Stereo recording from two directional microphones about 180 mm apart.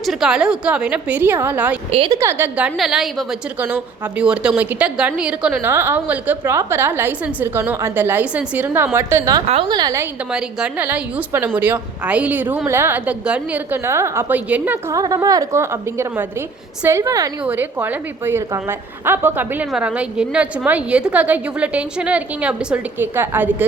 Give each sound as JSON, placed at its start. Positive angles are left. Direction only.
{"t": 0.0, "sound": "a woman's voice", "side_deg": 0}
{"t": 1.9, "sound": "a woman's voice", "side_deg": -30}
{"t": 2.1, "sound": "a woman's voice", "side_deg": -15}
{"t": 9.5, "sound": "a woman's voice", "side_deg": -30}
{"t": 10.3, "sound": "a woman's voice", "side_deg": -5}